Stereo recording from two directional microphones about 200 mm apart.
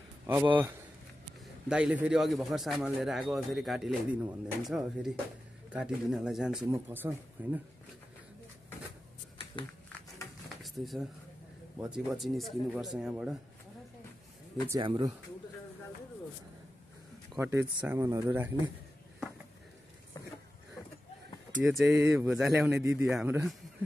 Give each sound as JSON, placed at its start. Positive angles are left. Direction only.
{"t": 0.3, "sound": "a man's voice", "side_deg": -5}
{"t": 10.6, "sound": "a man's voice", "side_deg": 0}
{"t": 14.8, "sound": "speech", "side_deg": -20}
{"t": 17.4, "sound": "speech", "side_deg": -15}
{"t": 20.2, "sound": "a sound", "side_deg": 15}
{"t": 21.6, "sound": "speech", "side_deg": -15}